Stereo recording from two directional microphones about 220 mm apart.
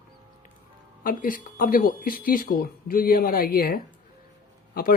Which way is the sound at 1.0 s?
40° left (ahead or behind).